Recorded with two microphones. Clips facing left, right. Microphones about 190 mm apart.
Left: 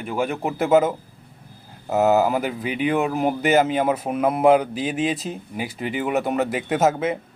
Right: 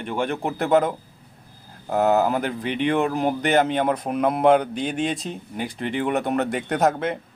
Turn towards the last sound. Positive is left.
turn(degrees=5)  # may be behind; listen again after turning